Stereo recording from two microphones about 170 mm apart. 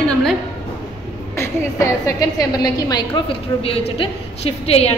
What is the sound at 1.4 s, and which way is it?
A woman's voice, 15° left (ahead or behind).